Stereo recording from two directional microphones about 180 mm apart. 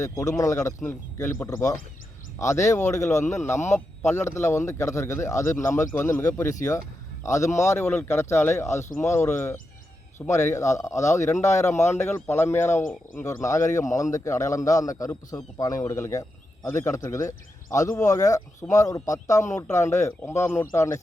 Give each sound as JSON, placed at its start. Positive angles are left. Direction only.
{"t": 0.0, "sound": "a man's voice", "side_deg": 15}
{"t": 11.4, "sound": "speech", "side_deg": 40}
{"t": 11.9, "sound": "a man's voice", "side_deg": 15}